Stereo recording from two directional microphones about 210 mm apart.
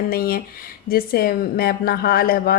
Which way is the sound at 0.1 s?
45° left (ahead or behind).